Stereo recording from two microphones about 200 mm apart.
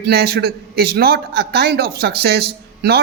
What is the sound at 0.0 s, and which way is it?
A man's voice, 50° right (ahead or behind).